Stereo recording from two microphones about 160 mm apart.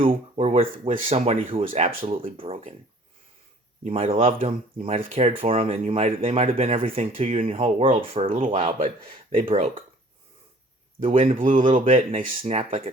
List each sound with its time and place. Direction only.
0.0 s speech: 40° right (ahead or behind)
3.8 s speech: 40° right (ahead or behind)
11.1 s speech: 35° right (ahead or behind)
11.3 s speech: 55° right (ahead or behind)
11.7 s speech: 40° right (ahead or behind)